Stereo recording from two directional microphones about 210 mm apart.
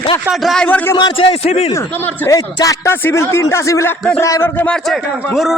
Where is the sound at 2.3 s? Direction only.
15° left (ahead or behind); by 5.5 s centre (ahead or behind).